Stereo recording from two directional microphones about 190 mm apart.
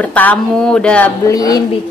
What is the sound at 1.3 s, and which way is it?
Speech, 20° left (ahead or behind).